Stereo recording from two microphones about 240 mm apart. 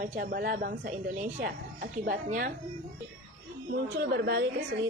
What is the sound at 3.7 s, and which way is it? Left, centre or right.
Speech, right.